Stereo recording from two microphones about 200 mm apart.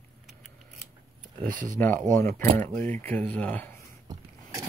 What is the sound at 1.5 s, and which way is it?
Speech, 40° right (ahead or behind).